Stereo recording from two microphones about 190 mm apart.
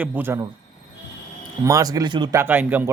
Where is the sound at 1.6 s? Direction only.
20° right (ahead or behind).